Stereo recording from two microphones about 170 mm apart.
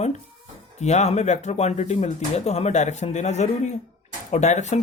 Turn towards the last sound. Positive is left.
turn(degrees=40)  # may be behind; listen again after turning